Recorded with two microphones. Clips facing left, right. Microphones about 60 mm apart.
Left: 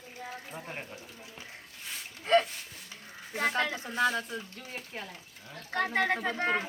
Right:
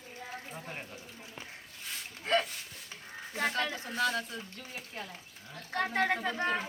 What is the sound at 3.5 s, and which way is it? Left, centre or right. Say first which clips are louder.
Speech: left 3 dB; left.